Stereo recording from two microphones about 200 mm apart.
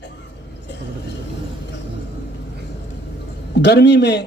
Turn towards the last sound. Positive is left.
turn(degrees=55)  # may be behind; listen again after turning